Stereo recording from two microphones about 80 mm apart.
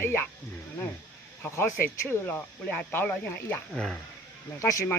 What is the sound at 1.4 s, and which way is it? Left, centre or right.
Speech, left.